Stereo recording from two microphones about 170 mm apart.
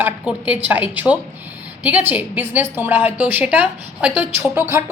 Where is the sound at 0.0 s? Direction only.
10° right (ahead or behind).